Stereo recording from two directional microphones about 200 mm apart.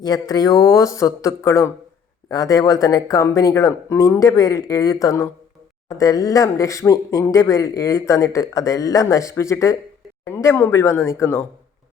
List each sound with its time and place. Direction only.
0.0 s speech: 20° left (ahead or behind)